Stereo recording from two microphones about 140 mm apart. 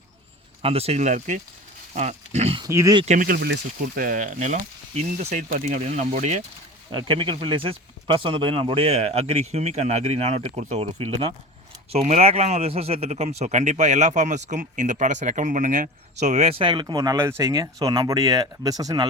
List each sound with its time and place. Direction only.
0.6 s a man's voice: 45° right (ahead or behind)
2.0 s a sound: 50° right (ahead or behind)
2.6 s speech: 20° right (ahead or behind)
3.1 s speech: 85° right; by 6.4 s 55° right (ahead or behind)
6.9 s a man's voice: 35° right (ahead or behind)